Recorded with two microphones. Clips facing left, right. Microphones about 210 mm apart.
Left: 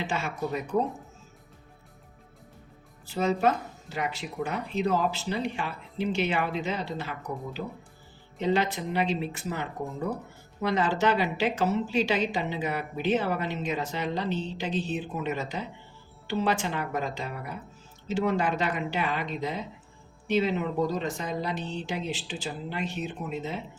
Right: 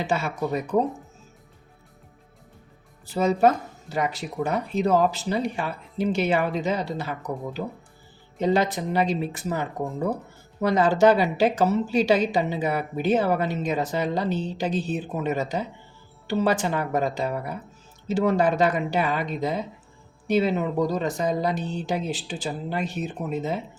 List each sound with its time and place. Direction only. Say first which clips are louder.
0.0 s a woman's voice: right 5 dB; 40° right (ahead or behind)
3.2 s a woman's voice: right 5 dB; 40° right (ahead or behind)
8.4 s a woman's voice: right 4 dB; 45° right (ahead or behind)